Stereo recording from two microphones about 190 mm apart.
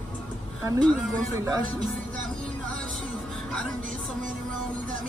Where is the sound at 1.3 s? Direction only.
15° right (ahead or behind).